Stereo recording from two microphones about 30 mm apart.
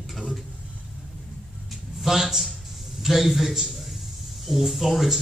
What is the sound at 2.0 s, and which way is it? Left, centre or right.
A man's voice, centre.